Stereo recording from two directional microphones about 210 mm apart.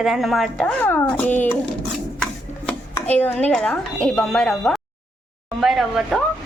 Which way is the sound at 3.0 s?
10° left (ahead or behind).